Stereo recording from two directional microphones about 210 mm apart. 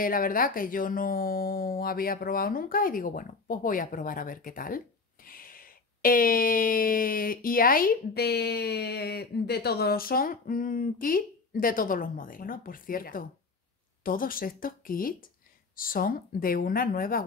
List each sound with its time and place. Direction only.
0.0 s speech: 40° left (ahead or behind)